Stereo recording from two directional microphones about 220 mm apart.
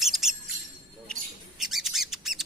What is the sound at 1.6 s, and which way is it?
Bird, centre (ahead or behind).